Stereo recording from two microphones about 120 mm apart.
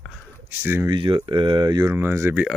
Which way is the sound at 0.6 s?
20° right (ahead or behind).